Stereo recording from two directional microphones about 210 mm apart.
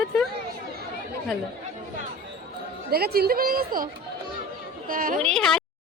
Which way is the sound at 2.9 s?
45° right (ahead or behind).